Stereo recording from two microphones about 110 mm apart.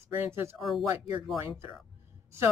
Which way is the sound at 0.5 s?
Centre (ahead or behind).